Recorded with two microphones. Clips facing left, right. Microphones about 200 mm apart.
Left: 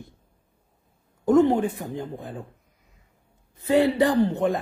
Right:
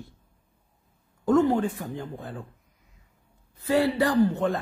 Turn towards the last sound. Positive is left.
turn(degrees=15)  # may be behind; listen again after turning